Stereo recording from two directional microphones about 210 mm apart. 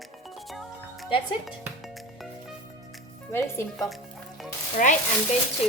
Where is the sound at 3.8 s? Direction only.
Centre (ahead or behind).